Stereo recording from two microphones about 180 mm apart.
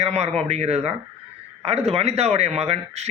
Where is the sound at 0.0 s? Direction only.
35° right (ahead or behind).